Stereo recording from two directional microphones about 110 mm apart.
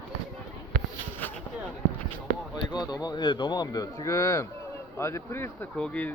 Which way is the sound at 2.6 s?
40° left (ahead or behind).